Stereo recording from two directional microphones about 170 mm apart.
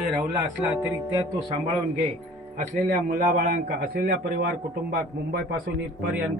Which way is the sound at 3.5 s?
60° right (ahead or behind).